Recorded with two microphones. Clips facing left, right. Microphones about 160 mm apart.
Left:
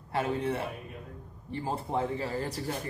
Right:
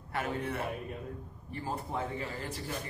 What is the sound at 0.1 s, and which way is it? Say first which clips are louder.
A man's voice: left 5 dB; 30° left (ahead or behind).